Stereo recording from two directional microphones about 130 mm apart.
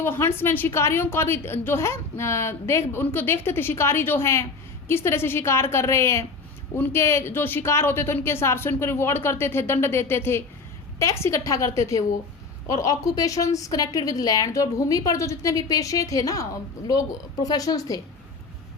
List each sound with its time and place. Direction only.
0.0 s a woman's voice: 15° left (ahead or behind)